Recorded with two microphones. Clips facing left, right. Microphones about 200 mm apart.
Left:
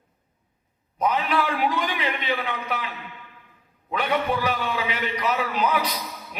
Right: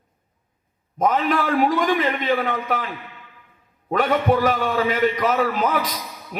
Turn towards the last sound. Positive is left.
turn(degrees=-45)  # may be behind; listen again after turning